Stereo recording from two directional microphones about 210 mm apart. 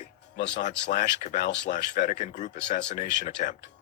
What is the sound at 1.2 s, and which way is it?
Speech, 40° left (ahead or behind).